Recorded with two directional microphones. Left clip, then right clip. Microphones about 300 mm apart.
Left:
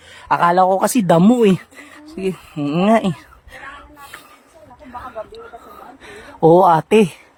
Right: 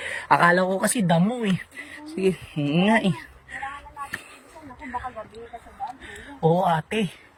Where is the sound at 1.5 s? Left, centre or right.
Centre.